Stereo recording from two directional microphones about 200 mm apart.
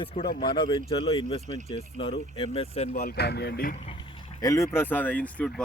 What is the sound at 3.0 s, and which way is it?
Speech, 50° left (ahead or behind).